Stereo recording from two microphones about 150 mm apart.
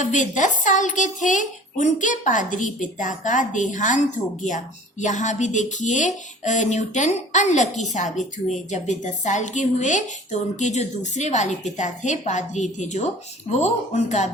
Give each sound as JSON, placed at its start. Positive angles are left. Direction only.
{"t": 0.0, "sound": "a woman's voice", "side_deg": 55}